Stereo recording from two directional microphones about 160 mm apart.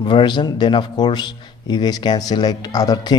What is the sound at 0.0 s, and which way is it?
Speech, 30° left (ahead or behind).